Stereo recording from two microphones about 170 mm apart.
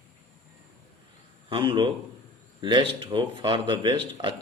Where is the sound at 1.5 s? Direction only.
30° right (ahead or behind).